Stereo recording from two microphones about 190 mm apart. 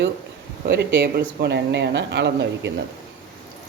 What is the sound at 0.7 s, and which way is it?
Speech, 65° right (ahead or behind).